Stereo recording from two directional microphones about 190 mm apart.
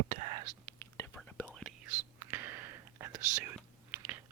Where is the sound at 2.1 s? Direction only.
10° right (ahead or behind).